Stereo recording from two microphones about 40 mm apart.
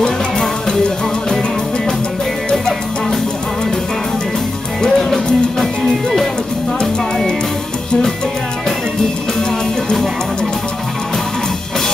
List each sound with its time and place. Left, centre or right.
0.0 s music: centre
4.8 s music: centre